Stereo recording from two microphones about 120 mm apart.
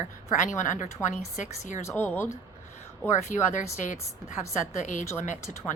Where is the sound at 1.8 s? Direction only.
20° left (ahead or behind).